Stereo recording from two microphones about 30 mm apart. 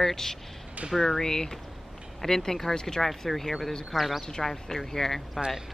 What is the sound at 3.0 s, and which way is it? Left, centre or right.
Speech, centre.